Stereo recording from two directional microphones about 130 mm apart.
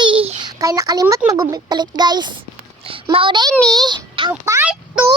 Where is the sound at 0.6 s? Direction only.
25° right (ahead or behind).